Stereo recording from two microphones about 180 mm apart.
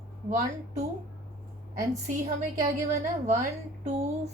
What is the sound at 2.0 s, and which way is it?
Speech, 40° right (ahead or behind).